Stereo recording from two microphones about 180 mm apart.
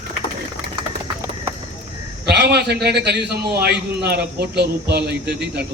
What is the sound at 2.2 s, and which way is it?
A man's voice, 65° right (ahead or behind).